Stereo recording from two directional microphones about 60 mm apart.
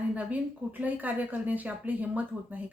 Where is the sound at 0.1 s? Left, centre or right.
Right.